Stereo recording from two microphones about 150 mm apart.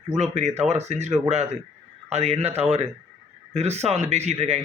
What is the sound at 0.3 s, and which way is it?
Speech, 50° right (ahead or behind).